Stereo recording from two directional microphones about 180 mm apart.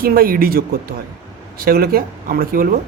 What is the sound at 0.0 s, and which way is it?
A man's voice, 55° right (ahead or behind).